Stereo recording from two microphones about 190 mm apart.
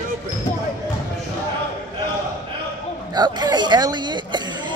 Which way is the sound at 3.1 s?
20° right (ahead or behind).